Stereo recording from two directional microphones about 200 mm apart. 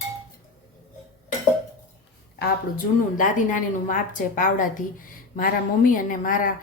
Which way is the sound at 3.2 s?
40° left (ahead or behind).